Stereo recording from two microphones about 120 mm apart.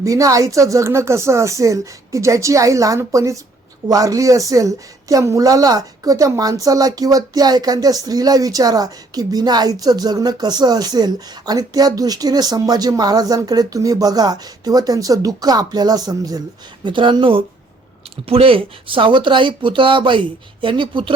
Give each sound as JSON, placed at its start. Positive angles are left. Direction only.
{"t": 0.0, "sound": "speech", "side_deg": -30}